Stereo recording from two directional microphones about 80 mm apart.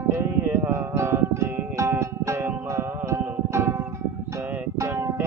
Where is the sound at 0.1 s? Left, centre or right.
Right.